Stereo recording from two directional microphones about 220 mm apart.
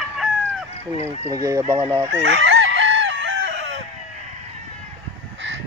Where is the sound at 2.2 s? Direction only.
50° right (ahead or behind).